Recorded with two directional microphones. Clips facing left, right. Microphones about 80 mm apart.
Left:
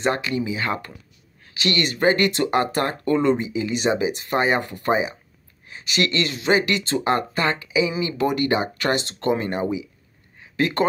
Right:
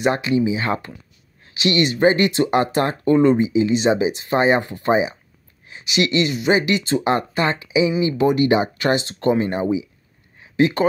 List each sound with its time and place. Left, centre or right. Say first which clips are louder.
0.0 s speech: right 5 dB; right